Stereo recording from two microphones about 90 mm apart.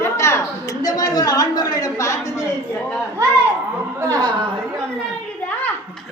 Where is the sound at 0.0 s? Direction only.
30° left (ahead or behind).